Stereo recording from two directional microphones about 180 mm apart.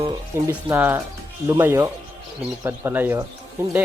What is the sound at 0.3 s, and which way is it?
A man's voice, 15° right (ahead or behind).